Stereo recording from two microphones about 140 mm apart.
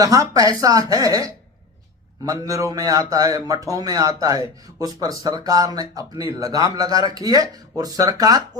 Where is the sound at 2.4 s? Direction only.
25° right (ahead or behind).